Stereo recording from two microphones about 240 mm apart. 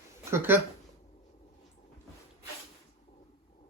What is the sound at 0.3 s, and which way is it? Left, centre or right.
Speech, centre.